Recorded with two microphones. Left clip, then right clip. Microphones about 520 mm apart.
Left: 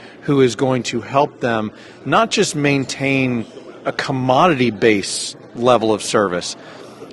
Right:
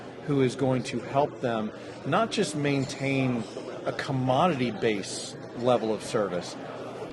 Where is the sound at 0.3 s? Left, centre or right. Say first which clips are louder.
Left 11 dB; left.